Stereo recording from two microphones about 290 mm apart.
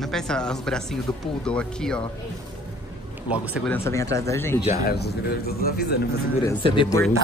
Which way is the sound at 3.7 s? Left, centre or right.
Centre.